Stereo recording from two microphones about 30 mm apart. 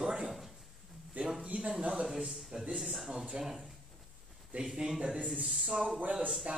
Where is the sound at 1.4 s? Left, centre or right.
Right.